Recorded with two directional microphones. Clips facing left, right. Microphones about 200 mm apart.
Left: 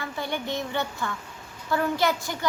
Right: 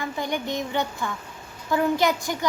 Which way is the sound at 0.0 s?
15° right (ahead or behind).